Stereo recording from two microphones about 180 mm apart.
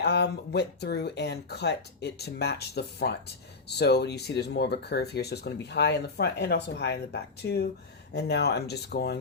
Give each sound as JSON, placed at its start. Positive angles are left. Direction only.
{"t": 0.0, "sound": "speech", "side_deg": 65}